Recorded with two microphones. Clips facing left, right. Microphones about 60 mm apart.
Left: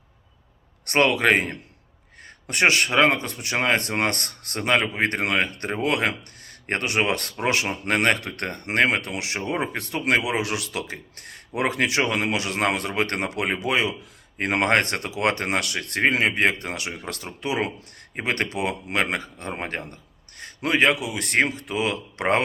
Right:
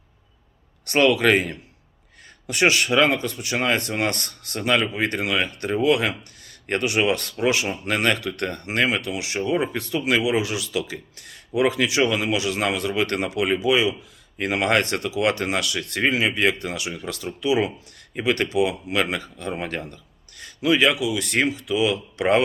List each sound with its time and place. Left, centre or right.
0.9 s speech: left